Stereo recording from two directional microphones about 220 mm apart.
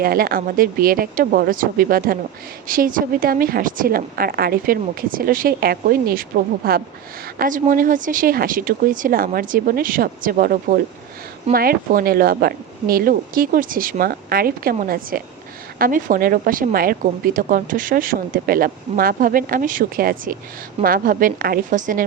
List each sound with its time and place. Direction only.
0.0 s a woman's voice: 45° right (ahead or behind)
7.3 s a woman's voice: 40° right (ahead or behind)